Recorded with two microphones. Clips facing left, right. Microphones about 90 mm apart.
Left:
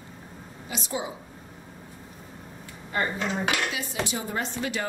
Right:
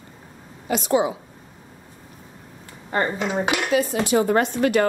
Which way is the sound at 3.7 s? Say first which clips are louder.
Right 10 dB; 50° right (ahead or behind).